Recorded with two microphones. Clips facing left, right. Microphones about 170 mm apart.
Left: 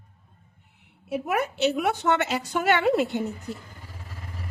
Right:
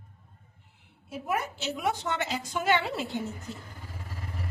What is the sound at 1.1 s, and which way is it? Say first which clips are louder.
A woman's voice: left 5 dB; 70° left (ahead or behind).